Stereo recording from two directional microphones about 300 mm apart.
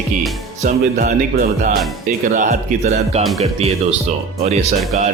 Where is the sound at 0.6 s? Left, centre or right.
Right.